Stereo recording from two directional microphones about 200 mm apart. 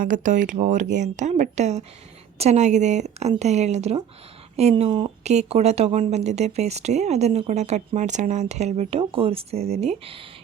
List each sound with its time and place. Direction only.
0.0 s speech: 40° right (ahead or behind)